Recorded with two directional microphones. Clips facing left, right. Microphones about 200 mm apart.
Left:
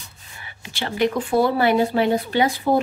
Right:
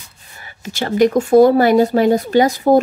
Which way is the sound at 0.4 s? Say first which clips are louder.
Right 6 dB; 40° right (ahead or behind).